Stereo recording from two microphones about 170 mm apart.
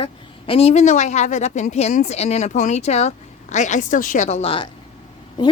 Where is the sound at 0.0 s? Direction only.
30° left (ahead or behind).